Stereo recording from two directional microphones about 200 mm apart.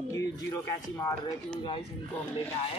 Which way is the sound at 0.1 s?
15° left (ahead or behind).